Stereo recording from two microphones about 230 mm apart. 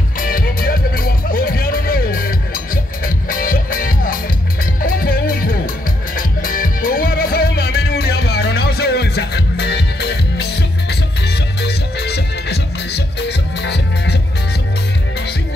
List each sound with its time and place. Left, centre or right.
0.2 s music: left